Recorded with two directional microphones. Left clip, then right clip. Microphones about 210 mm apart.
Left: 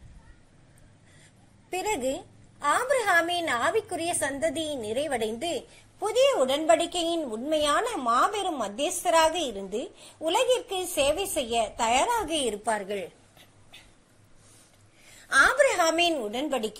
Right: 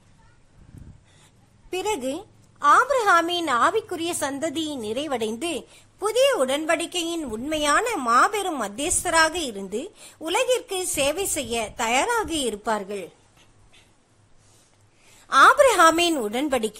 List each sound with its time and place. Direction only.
1.7 s a woman's voice: 20° right (ahead or behind)
12.8 s a woman's voice: 15° right (ahead or behind)
15.6 s a woman's voice: 30° right (ahead or behind)